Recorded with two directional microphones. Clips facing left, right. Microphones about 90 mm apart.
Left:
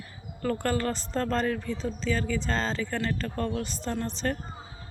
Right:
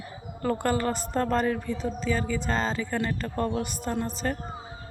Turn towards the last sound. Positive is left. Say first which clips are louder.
# right 1 dB
turn(degrees=-5)  # may be behind; listen again after turning